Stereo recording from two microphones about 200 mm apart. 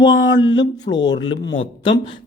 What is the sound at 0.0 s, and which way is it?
Speech, 20° left (ahead or behind).